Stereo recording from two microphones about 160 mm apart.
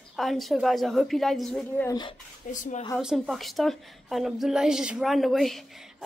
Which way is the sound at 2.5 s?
55° left (ahead or behind).